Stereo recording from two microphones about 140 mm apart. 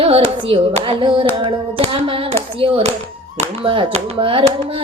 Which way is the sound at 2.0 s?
40° right (ahead or behind).